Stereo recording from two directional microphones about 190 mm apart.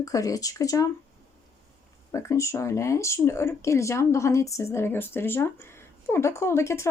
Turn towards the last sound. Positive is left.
turn(degrees=15)  # may be behind; listen again after turning